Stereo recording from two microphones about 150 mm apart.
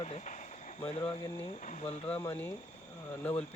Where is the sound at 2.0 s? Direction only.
10° left (ahead or behind).